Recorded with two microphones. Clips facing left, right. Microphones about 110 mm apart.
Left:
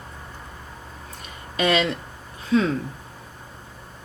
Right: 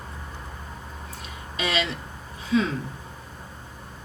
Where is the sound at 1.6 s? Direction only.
55° left (ahead or behind).